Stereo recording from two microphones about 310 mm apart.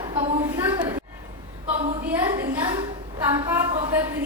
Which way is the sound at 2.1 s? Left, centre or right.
Centre.